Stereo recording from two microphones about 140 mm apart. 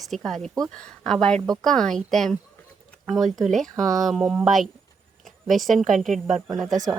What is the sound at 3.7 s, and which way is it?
Speech, 25° right (ahead or behind).